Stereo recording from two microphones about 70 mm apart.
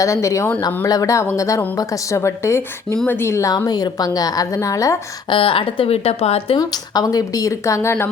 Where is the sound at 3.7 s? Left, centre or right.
Left.